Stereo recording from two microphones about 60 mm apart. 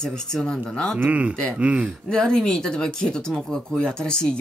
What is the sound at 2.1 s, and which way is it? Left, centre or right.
Speech, centre.